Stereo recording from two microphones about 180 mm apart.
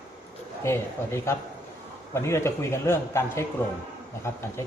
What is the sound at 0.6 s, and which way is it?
Speech, 15° left (ahead or behind).